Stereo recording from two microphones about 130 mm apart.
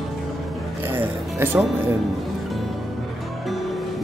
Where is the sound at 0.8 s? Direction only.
15° right (ahead or behind).